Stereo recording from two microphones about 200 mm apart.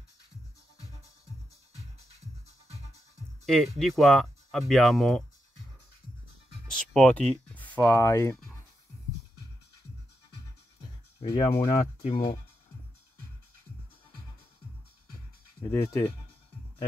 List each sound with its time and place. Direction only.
3.4 s speech: centre (ahead or behind)
6.7 s a sound: 5° left (ahead or behind)
7.4 s speech: 10° left (ahead or behind)
11.1 s speech: 25° left (ahead or behind)
15.7 s speech: 10° left (ahead or behind)